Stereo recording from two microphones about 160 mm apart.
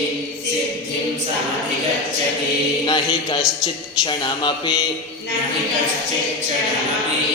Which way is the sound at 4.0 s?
30° left (ahead or behind).